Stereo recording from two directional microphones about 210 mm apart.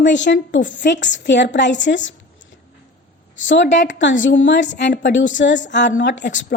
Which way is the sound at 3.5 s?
60° left (ahead or behind).